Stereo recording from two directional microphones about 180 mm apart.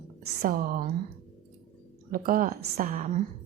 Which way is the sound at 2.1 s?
50° right (ahead or behind).